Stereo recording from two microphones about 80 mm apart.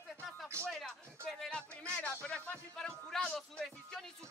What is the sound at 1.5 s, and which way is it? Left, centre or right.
Speech, centre.